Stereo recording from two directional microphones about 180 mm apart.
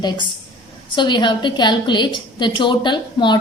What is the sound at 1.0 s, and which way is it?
A woman's voice, 25° left (ahead or behind).